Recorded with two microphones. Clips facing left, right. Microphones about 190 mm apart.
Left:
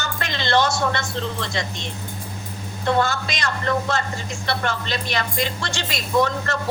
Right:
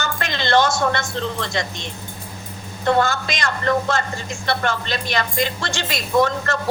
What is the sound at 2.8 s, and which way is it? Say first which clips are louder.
Speech: right 2 dB; 50° right (ahead or behind).